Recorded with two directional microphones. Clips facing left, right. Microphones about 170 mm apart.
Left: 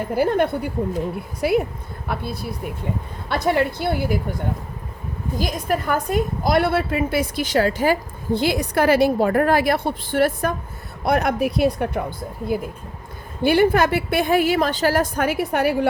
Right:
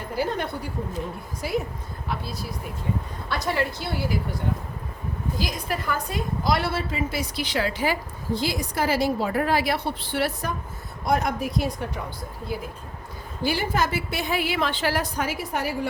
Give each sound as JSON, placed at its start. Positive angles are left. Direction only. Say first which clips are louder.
{"t": 0.2, "sound": "a woman's voice", "louder": "left 8 dB", "side_deg": 55}
{"t": 3.2, "sound": "a woman's voice", "louder": "left 7 dB", "side_deg": 60}
{"t": 5.4, "sound": "a woman's voice", "louder": "left 8 dB", "side_deg": 50}
{"t": 11.0, "sound": "a woman's voice", "louder": "left 5 dB", "side_deg": 65}
{"t": 12.5, "sound": "a woman's voice", "louder": "left 7 dB", "side_deg": 50}